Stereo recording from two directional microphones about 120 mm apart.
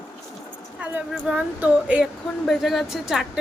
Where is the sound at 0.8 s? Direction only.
10° right (ahead or behind).